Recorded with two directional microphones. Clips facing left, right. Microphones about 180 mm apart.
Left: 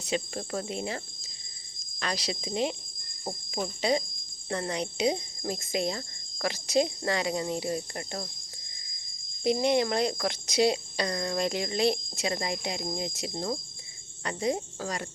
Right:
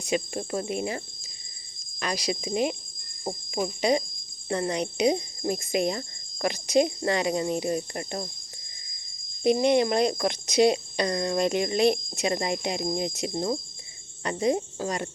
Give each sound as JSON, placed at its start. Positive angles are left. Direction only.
{"t": 0.0, "sound": "speech", "side_deg": -15}
{"t": 3.8, "sound": "speech", "side_deg": -20}
{"t": 9.4, "sound": "speech", "side_deg": -20}